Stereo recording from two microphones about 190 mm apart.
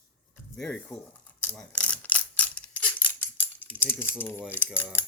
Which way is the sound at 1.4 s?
10° left (ahead or behind).